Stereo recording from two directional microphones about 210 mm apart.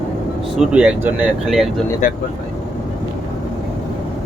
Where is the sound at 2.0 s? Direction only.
40° left (ahead or behind).